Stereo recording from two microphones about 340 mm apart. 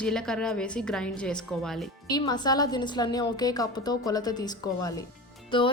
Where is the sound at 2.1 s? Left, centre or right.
Centre.